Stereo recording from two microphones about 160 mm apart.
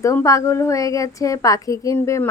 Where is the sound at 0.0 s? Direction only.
20° left (ahead or behind).